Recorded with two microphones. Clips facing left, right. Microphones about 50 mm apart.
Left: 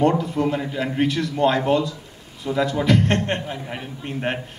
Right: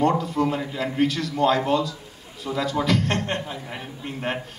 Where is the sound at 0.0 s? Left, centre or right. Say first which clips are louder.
Left 2 dB; left.